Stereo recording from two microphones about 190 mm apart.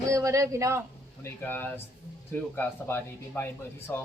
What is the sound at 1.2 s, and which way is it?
Speech, 10° left (ahead or behind).